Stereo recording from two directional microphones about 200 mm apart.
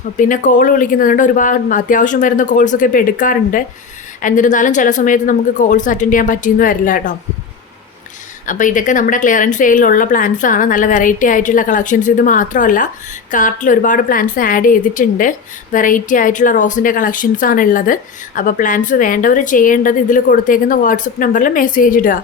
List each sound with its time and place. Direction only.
0.2 s a woman's voice: 40° left (ahead or behind)
8.4 s a woman's voice: 40° left (ahead or behind)